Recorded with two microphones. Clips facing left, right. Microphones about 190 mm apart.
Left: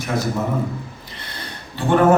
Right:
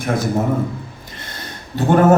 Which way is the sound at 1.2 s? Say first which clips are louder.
Right 1 dB; 45° right (ahead or behind).